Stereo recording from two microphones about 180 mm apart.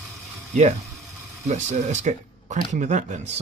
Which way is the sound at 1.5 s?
40° right (ahead or behind).